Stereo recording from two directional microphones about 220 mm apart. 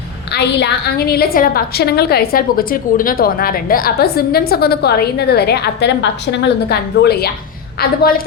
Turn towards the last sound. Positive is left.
turn(degrees=45)  # may be behind; listen again after turning